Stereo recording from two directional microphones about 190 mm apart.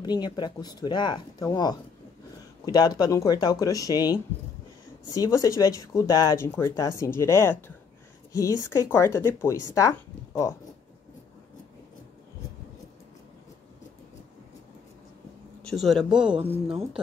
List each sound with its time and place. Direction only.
0.0 s speech: 20° left (ahead or behind)
15.6 s speech: centre (ahead or behind)